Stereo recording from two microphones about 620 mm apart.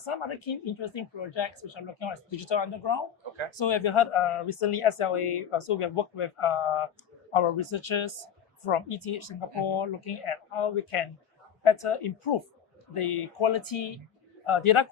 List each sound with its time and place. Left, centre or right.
0.0 s speech: left